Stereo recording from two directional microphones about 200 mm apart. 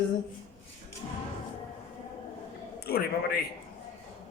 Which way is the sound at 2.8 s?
50° left (ahead or behind).